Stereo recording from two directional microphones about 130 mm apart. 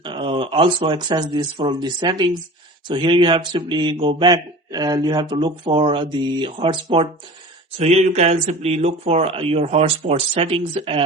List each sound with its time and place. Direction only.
0.0 s speech: 40° right (ahead or behind)
7.8 s speech: 55° right (ahead or behind)